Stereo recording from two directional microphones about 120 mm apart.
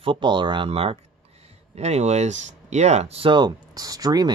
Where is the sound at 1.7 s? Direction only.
65° right (ahead or behind).